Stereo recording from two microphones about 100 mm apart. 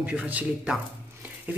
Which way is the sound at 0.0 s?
15° right (ahead or behind).